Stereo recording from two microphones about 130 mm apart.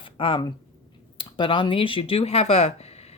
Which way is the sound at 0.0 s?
40° left (ahead or behind).